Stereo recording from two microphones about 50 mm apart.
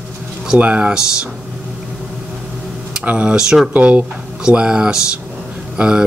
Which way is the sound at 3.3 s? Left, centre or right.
Centre.